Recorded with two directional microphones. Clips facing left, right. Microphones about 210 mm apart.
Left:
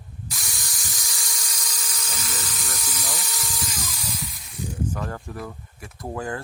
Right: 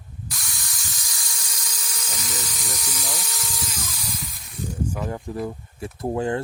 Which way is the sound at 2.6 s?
10° right (ahead or behind).